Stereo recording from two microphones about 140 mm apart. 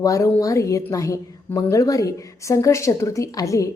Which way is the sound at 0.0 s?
25° left (ahead or behind).